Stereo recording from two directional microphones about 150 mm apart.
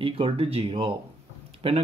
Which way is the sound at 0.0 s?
40° right (ahead or behind).